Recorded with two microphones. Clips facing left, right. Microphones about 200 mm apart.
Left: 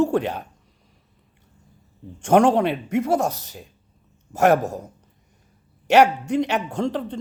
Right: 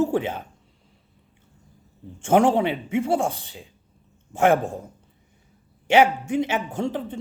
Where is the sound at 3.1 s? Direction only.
75° left (ahead or behind).